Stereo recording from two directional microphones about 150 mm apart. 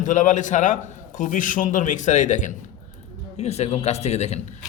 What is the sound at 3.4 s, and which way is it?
A man's voice, 45° left (ahead or behind).